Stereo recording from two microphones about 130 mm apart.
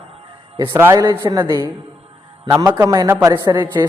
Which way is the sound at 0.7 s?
20° right (ahead or behind).